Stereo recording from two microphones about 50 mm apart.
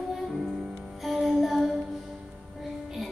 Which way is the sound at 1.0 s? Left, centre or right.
Centre.